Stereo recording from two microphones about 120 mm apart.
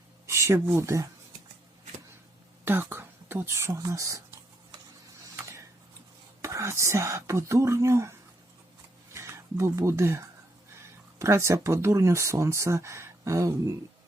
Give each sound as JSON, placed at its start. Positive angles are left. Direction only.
{"t": 0.3, "sound": "speech", "side_deg": -20}
{"t": 2.6, "sound": "speech", "side_deg": -20}
{"t": 5.4, "sound": "tick-tock", "side_deg": -25}
{"t": 6.4, "sound": "speech", "side_deg": -25}
{"t": 9.1, "sound": "speech", "side_deg": -25}